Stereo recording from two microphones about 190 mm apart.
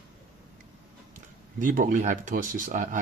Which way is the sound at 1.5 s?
45° right (ahead or behind).